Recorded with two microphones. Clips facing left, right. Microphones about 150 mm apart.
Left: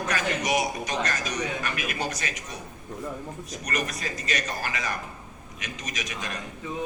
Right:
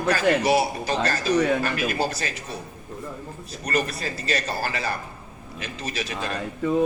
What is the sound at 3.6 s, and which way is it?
A man's voice, 30° right (ahead or behind).